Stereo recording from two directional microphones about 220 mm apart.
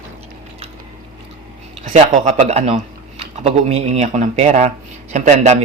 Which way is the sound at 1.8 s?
35° right (ahead or behind).